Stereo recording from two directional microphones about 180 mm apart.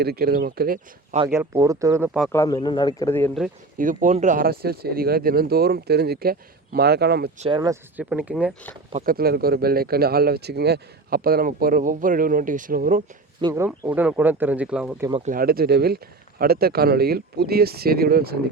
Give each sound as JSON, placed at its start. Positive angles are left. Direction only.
{"t": 0.0, "sound": "speech", "side_deg": -60}
{"t": 1.3, "sound": "speech", "side_deg": -15}
{"t": 2.3, "sound": "a man's voice", "side_deg": 15}
{"t": 3.1, "sound": "a man's voice", "side_deg": 10}
{"t": 3.8, "sound": "speech", "side_deg": -45}
{"t": 7.3, "sound": "speech", "side_deg": -35}
{"t": 7.6, "sound": "speech", "side_deg": -15}
{"t": 9.0, "sound": "speech", "side_deg": -55}
{"t": 13.4, "sound": "speech", "side_deg": -15}
{"t": 15.1, "sound": "speech", "side_deg": -45}